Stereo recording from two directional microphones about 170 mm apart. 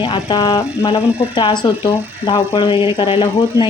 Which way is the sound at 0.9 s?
30° left (ahead or behind).